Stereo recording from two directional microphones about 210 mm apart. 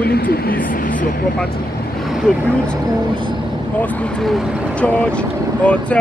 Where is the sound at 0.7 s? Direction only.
40° left (ahead or behind).